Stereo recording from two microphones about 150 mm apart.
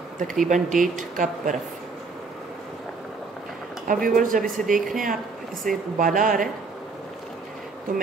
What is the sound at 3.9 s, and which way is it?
Speech, 70° right (ahead or behind).